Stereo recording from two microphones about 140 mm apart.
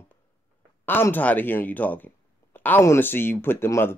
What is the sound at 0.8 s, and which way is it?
Speech, 15° left (ahead or behind).